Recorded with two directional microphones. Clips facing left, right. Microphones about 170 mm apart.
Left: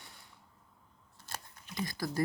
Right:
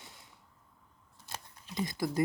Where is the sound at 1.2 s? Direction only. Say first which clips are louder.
Right 1 dB; 20° right (ahead or behind).